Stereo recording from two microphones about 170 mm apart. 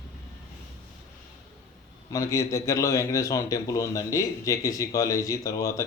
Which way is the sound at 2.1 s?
20° left (ahead or behind).